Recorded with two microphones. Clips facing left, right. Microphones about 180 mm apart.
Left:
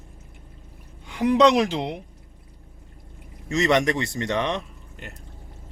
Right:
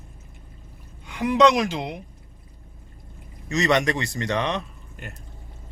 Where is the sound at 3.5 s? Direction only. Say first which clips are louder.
Left 1 dB; 25° left (ahead or behind).